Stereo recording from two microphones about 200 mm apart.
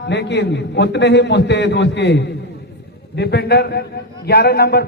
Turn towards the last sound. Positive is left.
turn(degrees=50)  # may be behind; listen again after turning